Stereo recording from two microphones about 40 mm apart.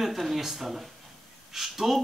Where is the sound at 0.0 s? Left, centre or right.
Centre.